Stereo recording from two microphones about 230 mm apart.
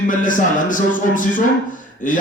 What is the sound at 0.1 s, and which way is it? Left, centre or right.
A man's voice, left.